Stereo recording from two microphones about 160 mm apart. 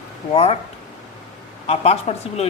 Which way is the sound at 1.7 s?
40° left (ahead or behind).